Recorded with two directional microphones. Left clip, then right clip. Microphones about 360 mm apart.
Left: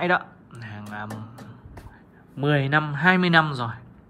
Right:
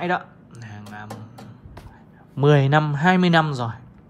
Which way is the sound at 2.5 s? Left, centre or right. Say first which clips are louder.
Right 3 dB; centre.